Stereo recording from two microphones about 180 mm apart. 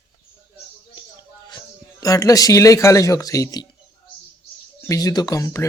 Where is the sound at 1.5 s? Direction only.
20° left (ahead or behind).